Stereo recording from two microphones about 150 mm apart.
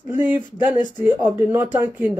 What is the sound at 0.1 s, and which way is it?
Speech, 15° right (ahead or behind).